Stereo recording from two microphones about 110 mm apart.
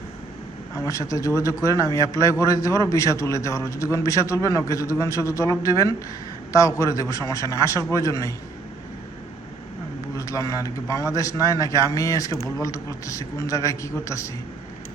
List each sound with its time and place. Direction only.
0.8 s a man's voice: 30° left (ahead or behind)
10.2 s a man's voice: 30° left (ahead or behind)